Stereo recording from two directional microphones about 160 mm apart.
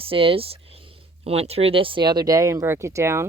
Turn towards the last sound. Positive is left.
turn(degrees=-15)  # may be behind; listen again after turning